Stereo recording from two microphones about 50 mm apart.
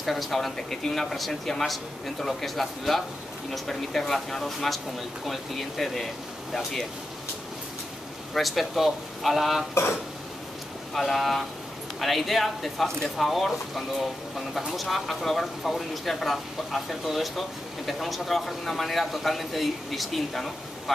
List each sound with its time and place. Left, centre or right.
0.0 s speech: centre
8.4 s speech: centre
11.0 s speech: centre